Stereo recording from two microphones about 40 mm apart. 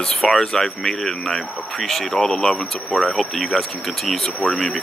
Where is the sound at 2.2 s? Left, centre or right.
Left.